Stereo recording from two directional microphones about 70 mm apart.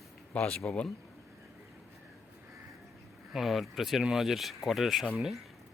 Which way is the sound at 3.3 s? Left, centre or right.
Centre.